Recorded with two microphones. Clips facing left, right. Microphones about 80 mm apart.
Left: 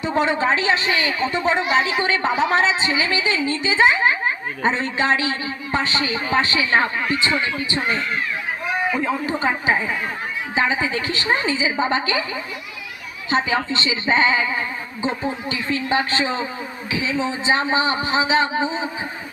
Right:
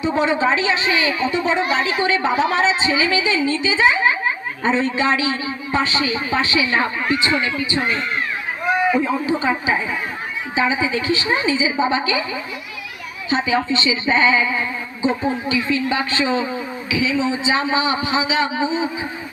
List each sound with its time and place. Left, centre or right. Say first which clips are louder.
0.0 s a woman's voice: right 2 dB; left
9.0 s a woman's voice: right 3 dB; left